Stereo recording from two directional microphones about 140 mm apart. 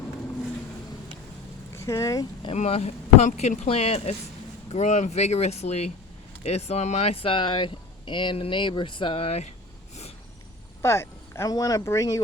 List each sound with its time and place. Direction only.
1.7 s speech: 20° left (ahead or behind)
2.6 s speech: 45° left (ahead or behind)
10.8 s speech: 20° left (ahead or behind)